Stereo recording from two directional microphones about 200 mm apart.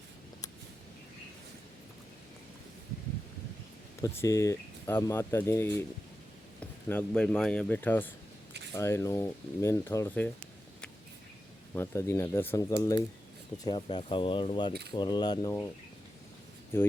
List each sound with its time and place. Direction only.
4.0 s speech: 15° left (ahead or behind)
11.7 s speech: 15° left (ahead or behind)
14.7 s speech: 55° right (ahead or behind)
14.9 s speech: 20° left (ahead or behind)
16.7 s speech: 10° left (ahead or behind)